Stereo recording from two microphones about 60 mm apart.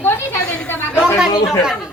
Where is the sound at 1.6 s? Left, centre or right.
Centre.